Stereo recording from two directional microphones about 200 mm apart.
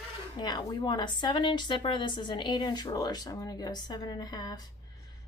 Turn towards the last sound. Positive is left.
turn(degrees=20)  # may be behind; listen again after turning